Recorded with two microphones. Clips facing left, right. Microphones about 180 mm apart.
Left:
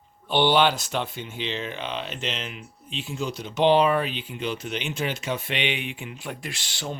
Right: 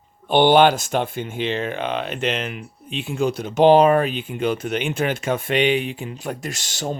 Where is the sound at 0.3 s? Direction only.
50° right (ahead or behind).